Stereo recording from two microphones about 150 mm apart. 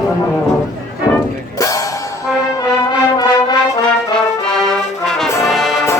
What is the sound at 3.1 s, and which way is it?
Music, 25° left (ahead or behind).